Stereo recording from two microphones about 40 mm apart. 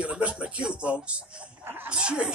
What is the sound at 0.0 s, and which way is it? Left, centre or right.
Speech, right.